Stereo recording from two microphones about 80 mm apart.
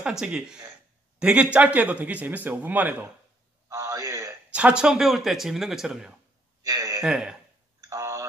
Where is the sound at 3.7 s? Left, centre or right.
Right.